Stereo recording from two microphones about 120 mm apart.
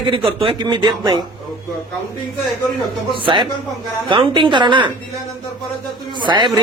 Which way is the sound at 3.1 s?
40° right (ahead or behind).